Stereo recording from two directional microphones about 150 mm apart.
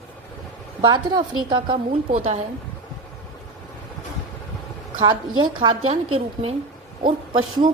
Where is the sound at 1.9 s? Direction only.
45° right (ahead or behind).